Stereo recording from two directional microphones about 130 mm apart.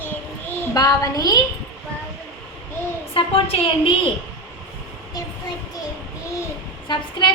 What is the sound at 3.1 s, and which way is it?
Speech, 45° left (ahead or behind).